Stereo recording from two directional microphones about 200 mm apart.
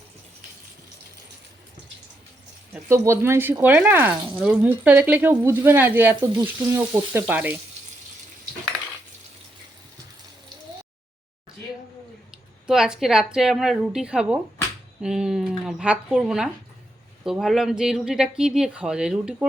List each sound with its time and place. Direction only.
2.7 s speech: 15° right (ahead or behind)
12.6 s speech: 5° right (ahead or behind)